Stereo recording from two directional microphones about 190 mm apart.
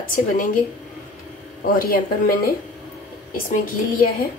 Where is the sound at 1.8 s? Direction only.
50° left (ahead or behind).